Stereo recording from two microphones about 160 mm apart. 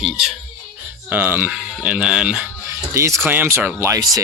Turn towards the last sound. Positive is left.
turn(degrees=-20)  # may be behind; listen again after turning